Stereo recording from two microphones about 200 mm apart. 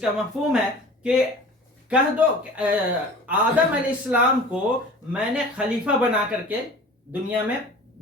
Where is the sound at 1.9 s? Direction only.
5° right (ahead or behind).